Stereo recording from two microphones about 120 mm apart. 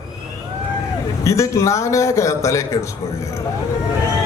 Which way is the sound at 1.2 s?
25° left (ahead or behind).